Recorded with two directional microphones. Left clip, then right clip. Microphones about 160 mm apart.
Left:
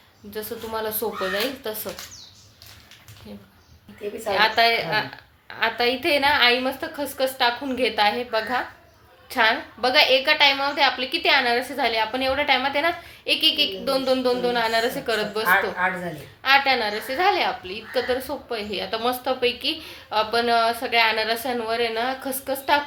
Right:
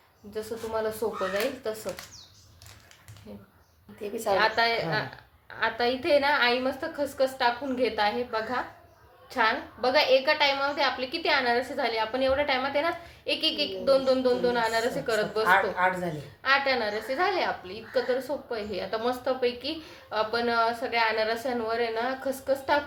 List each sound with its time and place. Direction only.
0.3 s a woman's voice: 20° left (ahead or behind)
4.4 s a woman's voice: 25° left (ahead or behind)
15.8 s speech: 80° right
16.4 s a woman's voice: 25° left (ahead or behind)